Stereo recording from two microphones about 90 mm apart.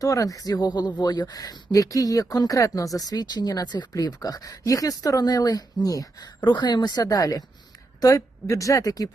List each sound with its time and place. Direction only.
0.0 s a woman's voice: 40° left (ahead or behind)
6.4 s a woman's voice: 55° left (ahead or behind)